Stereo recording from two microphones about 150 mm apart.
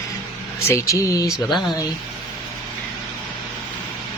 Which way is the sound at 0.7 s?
20° left (ahead or behind).